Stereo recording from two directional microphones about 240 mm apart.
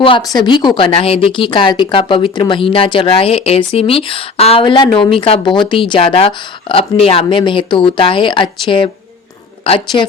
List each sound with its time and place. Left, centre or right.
0.0 s speech: left